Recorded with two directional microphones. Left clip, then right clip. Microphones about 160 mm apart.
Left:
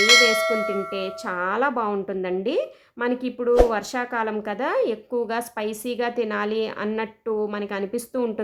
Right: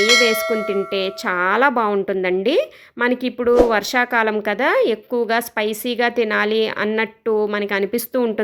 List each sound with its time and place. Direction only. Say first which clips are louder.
0.0 s bell: right 1 dB; centre (ahead or behind)
0.9 s a woman's voice: right 7 dB; 25° right (ahead or behind)